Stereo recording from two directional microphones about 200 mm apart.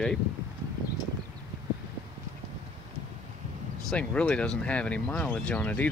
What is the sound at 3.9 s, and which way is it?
Speech, 5° left (ahead or behind).